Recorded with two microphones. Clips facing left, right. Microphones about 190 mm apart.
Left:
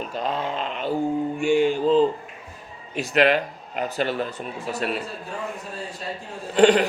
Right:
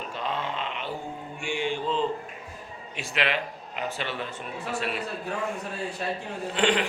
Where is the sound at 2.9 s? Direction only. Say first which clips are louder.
Left 9 dB; 40° left (ahead or behind).